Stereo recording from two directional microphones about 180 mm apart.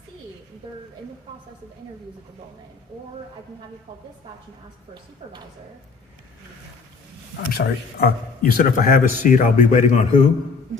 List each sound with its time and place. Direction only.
5.2 s a woman's voice: 30° right (ahead or behind)
7.5 s a man's voice: 60° left (ahead or behind)